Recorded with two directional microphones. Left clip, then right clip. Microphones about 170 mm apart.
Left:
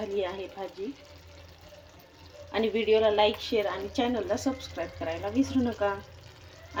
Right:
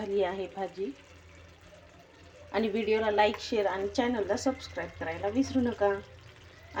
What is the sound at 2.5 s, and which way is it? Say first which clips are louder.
A woman's voice: left 4 dB; 15° right (ahead or behind).